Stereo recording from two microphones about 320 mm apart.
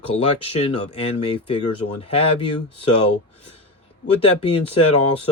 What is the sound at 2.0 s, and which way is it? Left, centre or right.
Speech, centre.